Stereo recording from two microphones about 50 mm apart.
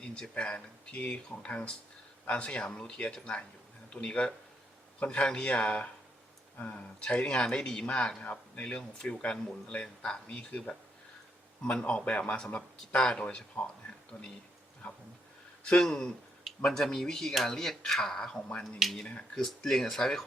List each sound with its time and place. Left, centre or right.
0.1 s speech: centre
11.6 s speech: left
15.8 s speech: centre